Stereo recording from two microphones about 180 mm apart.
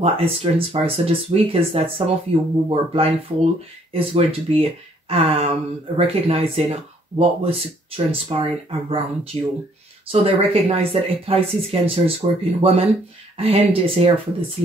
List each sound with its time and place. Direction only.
0.0 s speech: 30° right (ahead or behind)